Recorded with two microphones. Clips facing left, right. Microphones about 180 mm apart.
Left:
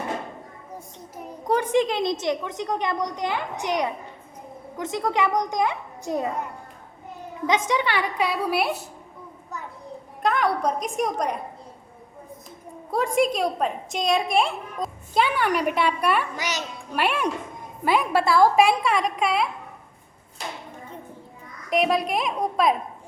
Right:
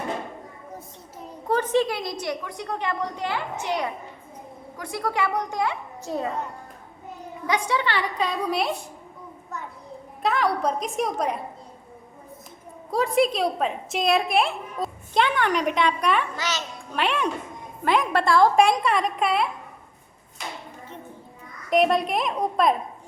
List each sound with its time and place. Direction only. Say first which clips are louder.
1.1 s a woman's voice: left 1 dB; 15° left (ahead or behind)
7.4 s a woman's voice: left 2 dB; 20° left (ahead or behind)
10.2 s a woman's voice: left 1 dB; centre (ahead or behind)
12.9 s a woman's voice: right 1 dB; centre (ahead or behind)
21.7 s a woman's voice: right 2 dB; centre (ahead or behind)